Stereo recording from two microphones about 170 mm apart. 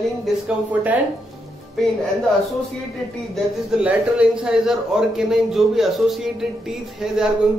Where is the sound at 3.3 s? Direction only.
5° right (ahead or behind).